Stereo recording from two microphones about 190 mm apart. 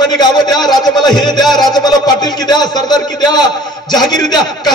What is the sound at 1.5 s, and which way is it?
A man's voice, 20° left (ahead or behind).